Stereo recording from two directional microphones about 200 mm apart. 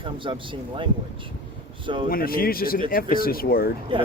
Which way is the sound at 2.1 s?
45° left (ahead or behind).